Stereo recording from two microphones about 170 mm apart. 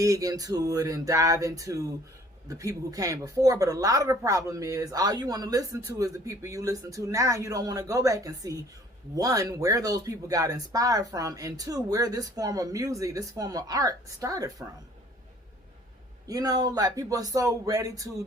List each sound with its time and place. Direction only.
0.0 s a woman's voice: 20° right (ahead or behind)
16.2 s a woman's voice: 20° right (ahead or behind)